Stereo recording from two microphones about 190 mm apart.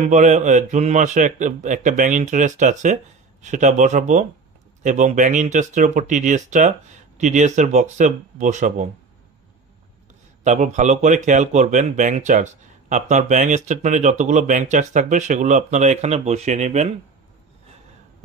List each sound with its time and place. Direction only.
0.0 s speech: 40° right (ahead or behind)
10.4 s speech: 40° right (ahead or behind)